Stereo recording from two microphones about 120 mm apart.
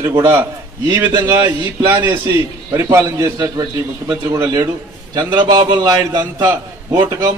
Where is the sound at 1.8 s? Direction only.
25° right (ahead or behind).